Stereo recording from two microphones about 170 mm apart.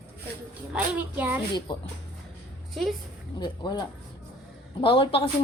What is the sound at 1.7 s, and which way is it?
Speech, 25° left (ahead or behind).